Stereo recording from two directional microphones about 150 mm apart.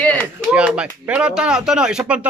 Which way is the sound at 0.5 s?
10° right (ahead or behind).